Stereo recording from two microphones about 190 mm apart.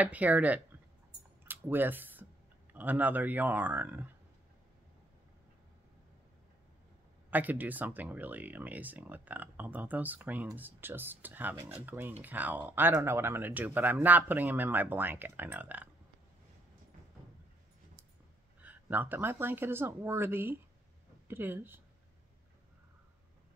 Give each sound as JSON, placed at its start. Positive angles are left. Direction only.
{"t": 0.0, "sound": "speech", "side_deg": -10}
{"t": 1.4, "sound": "a sound", "side_deg": -10}
{"t": 2.7, "sound": "speech", "side_deg": -10}
{"t": 7.2, "sound": "speech", "side_deg": -10}
{"t": 18.6, "sound": "speech", "side_deg": -10}